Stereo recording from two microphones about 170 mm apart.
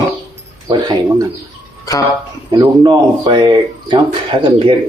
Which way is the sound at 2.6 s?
25° right (ahead or behind).